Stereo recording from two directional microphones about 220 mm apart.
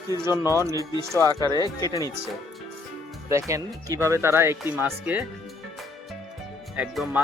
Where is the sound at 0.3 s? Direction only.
15° left (ahead or behind).